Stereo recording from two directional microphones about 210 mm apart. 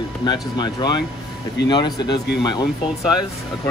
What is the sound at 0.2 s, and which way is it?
Speech, 20° left (ahead or behind).